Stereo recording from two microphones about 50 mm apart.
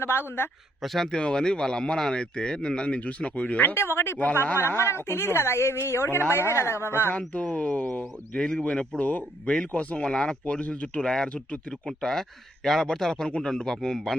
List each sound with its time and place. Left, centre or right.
0.0 s speech: left
0.8 s speech: centre
1.1 s speech: centre
3.8 s speech: left
4.8 s speech: left
7.3 s speech: left
8.4 s speech: centre
9.0 s speech: left
11.0 s speech: centre